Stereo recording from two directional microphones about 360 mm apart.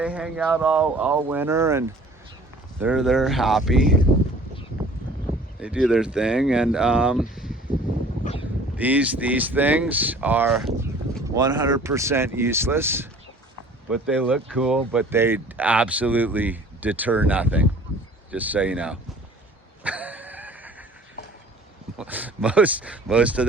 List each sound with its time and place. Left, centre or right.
0.0 s speech: centre
5.5 s speech: centre
8.2 s wind noise: centre
8.7 s speech: centre
11.3 s speech: centre
19.8 s a sound: centre
21.9 s speech: centre